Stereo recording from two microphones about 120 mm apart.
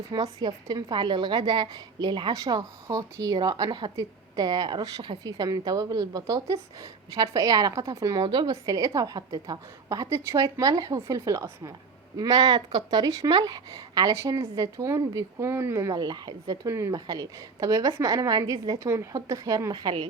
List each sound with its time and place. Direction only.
0.1 s a woman's voice: 35° right (ahead or behind)